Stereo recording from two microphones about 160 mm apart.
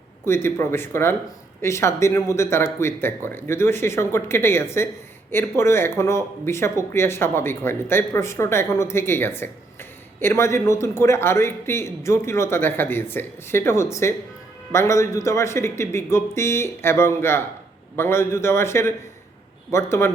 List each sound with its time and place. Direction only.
0.3 s speech: 15° left (ahead or behind)